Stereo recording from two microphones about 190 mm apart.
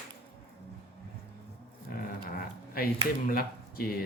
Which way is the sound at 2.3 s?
50° left (ahead or behind).